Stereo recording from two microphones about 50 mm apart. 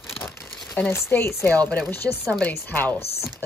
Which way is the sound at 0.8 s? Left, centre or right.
Left.